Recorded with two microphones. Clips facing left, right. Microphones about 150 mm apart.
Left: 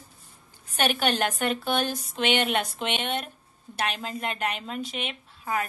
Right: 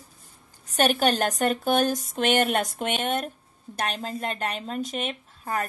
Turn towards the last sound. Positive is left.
turn(degrees=-45)  # may be behind; listen again after turning